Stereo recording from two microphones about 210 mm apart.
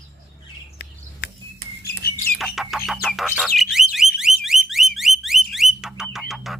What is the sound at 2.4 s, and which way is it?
Music, centre (ahead or behind).